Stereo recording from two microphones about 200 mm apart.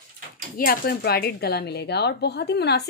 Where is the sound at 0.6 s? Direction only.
50° left (ahead or behind).